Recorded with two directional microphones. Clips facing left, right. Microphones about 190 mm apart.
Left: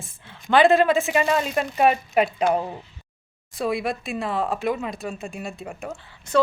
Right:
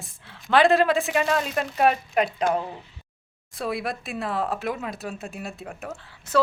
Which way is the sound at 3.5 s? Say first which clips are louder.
Left 4 dB; centre (ahead or behind).